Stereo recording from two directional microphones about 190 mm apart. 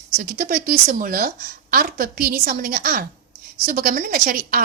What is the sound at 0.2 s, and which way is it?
A woman's voice, 50° right (ahead or behind).